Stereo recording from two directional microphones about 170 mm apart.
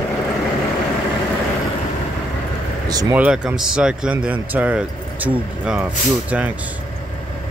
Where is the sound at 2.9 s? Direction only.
20° right (ahead or behind).